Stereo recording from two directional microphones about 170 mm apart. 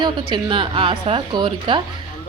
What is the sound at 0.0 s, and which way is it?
A woman's voice, 25° right (ahead or behind).